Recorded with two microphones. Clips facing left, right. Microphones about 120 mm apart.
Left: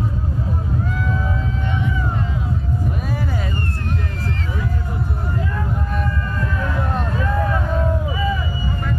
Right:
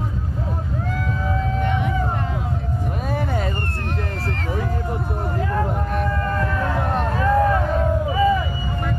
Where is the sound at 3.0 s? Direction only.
55° right (ahead or behind).